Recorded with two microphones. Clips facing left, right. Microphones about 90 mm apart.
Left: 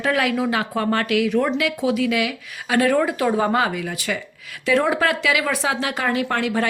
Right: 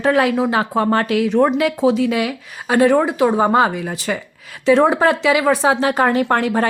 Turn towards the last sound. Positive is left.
turn(degrees=-40)  # may be behind; listen again after turning